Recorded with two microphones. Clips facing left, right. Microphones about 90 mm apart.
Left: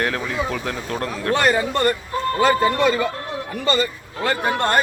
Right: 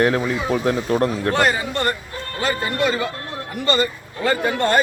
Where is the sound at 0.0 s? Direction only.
25° right (ahead or behind).